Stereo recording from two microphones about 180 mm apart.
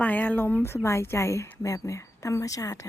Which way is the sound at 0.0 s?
10° left (ahead or behind).